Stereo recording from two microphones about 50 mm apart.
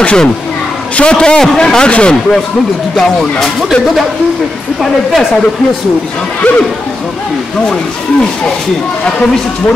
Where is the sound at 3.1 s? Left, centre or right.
Centre.